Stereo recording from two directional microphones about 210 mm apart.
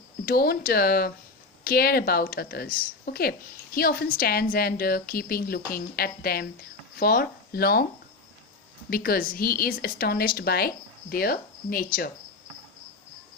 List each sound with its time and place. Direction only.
0.3 s a woman's voice: 45° left (ahead or behind)
8.9 s a woman's voice: 45° left (ahead or behind)